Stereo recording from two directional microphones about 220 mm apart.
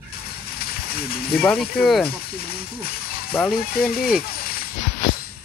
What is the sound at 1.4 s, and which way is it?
Speech, centre (ahead or behind).